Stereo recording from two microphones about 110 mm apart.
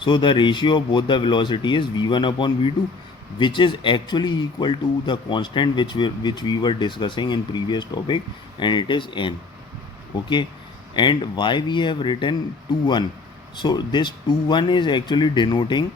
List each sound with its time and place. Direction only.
0.0 s a man's voice: 45° left (ahead or behind)
10.9 s a man's voice: 45° left (ahead or behind)